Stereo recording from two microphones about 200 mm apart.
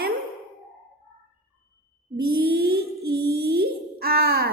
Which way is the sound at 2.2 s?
50° right (ahead or behind).